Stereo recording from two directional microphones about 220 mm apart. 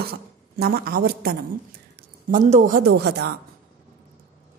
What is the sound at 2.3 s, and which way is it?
A woman's voice, 35° right (ahead or behind).